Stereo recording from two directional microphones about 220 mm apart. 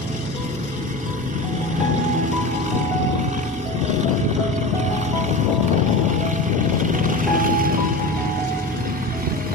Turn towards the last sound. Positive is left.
turn(degrees=-40)  # may be behind; listen again after turning